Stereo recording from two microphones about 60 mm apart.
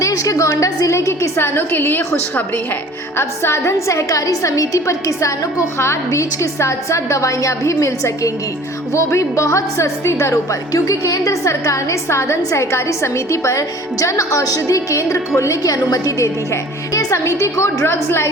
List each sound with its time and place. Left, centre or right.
0.0 s a woman's voice: left
1.5 s a woman's voice: left
3.2 s a woman's voice: left
5.7 s a woman's voice: left
10.7 s a woman's voice: left